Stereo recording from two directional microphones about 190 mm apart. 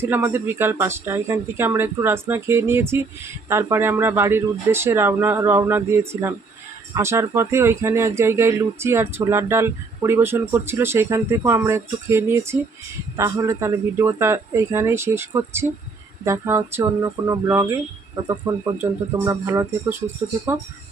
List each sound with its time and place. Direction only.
0.0 s speech: 10° right (ahead or behind)